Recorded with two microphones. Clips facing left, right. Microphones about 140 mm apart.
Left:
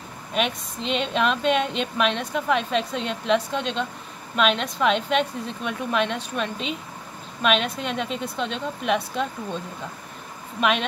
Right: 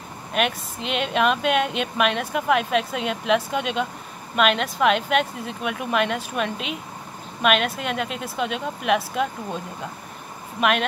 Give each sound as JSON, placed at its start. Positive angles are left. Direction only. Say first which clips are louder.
{"t": 0.3, "sound": "speech", "louder": "right 1 dB", "side_deg": -5}
{"t": 10.6, "sound": "speech", "louder": "right 1 dB", "side_deg": -5}